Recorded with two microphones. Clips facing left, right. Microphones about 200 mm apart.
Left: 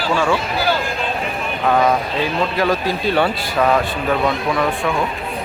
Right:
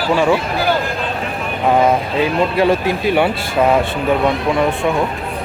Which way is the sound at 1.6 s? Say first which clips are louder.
Right 2 dB; 25° right (ahead or behind).